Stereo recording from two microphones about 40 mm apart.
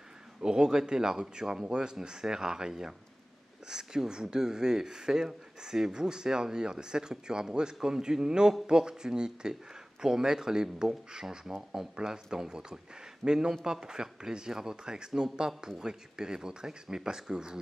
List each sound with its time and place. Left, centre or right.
0.4 s speech: centre